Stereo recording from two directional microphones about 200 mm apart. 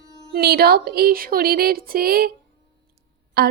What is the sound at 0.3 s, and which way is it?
A woman's voice, 50° right (ahead or behind).